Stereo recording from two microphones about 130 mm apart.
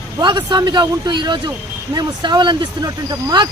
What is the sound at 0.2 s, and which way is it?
Speech, 35° right (ahead or behind).